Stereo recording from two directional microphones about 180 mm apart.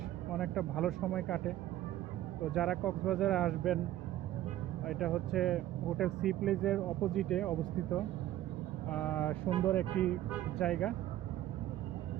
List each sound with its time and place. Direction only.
0.3 s speech: centre (ahead or behind)
2.6 s speech: centre (ahead or behind)
4.9 s speech: centre (ahead or behind)
8.9 s vehicle: 10° left (ahead or behind)
9.6 s speech: 10° left (ahead or behind)